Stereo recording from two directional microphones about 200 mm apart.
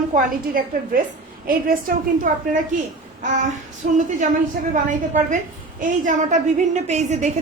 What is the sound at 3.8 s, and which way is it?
A woman's voice, 40° right (ahead or behind).